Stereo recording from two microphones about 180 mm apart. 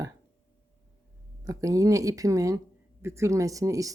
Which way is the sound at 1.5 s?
20° right (ahead or behind).